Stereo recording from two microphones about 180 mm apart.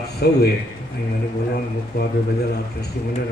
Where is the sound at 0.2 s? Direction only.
65° left (ahead or behind).